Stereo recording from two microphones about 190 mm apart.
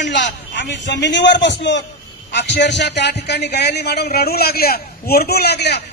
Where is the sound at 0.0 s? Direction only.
70° left (ahead or behind).